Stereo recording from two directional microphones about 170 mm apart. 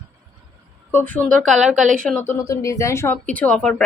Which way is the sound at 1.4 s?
Centre (ahead or behind).